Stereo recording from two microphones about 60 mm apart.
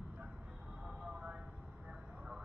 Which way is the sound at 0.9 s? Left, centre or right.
Centre.